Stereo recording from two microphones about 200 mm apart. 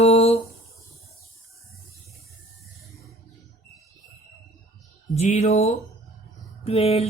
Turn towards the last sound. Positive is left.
turn(degrees=30)  # may be behind; listen again after turning